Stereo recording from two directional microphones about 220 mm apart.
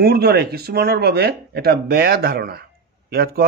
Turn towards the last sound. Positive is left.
turn(degrees=-45)  # may be behind; listen again after turning